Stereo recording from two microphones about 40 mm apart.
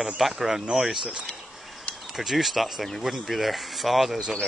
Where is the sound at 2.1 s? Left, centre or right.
Centre.